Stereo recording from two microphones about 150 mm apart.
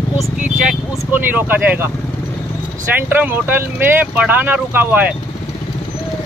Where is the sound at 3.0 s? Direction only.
10° right (ahead or behind).